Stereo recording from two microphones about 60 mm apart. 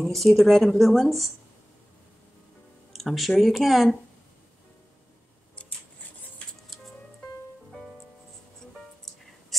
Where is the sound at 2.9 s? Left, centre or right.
Centre.